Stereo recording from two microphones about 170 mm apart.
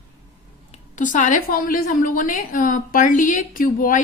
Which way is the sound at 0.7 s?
50° left (ahead or behind).